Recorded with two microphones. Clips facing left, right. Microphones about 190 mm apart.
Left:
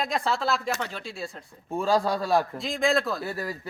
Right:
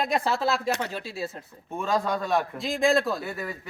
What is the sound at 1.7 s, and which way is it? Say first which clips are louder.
Speech: left 2 dB; 30° left (ahead or behind).